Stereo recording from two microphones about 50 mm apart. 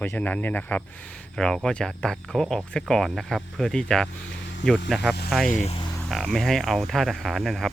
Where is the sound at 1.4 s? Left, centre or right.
Centre.